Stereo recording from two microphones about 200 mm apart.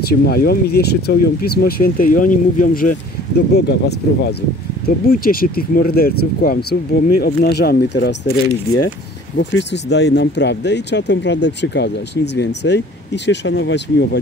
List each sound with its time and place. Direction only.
0.1 s speech: 50° left (ahead or behind)
9.4 s speech: 60° left (ahead or behind)